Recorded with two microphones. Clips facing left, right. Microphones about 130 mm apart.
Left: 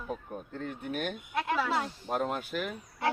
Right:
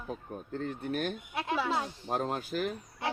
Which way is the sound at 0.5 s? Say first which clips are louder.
Right 2 dB; 40° right (ahead or behind).